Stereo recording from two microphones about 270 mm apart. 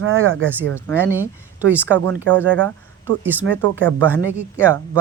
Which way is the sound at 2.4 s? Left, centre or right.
Right.